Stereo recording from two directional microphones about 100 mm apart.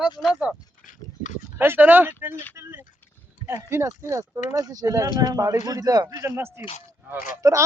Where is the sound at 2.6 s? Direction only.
20° right (ahead or behind).